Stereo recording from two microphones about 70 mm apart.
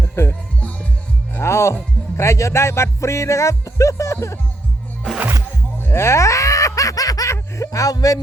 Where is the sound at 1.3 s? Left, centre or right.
Left.